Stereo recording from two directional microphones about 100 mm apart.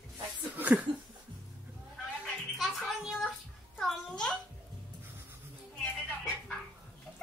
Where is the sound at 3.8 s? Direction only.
5° left (ahead or behind).